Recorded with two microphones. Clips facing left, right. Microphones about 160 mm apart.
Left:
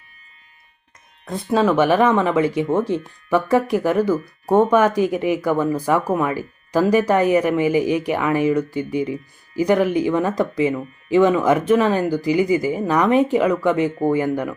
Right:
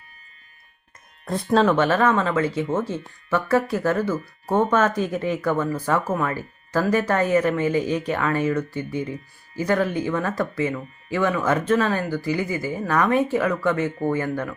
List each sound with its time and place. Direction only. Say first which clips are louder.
1.2 s speech: even; centre (ahead or behind)